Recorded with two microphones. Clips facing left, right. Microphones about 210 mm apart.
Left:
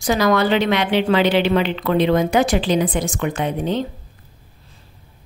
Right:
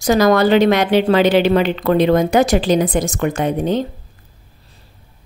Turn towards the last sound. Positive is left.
turn(degrees=-45)  # may be behind; listen again after turning